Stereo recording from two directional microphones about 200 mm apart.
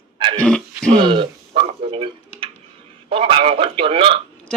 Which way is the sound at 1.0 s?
25° right (ahead or behind).